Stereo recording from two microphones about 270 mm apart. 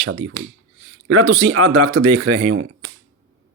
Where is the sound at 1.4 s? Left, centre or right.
Right.